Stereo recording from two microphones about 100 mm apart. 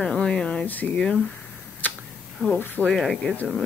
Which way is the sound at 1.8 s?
15° left (ahead or behind).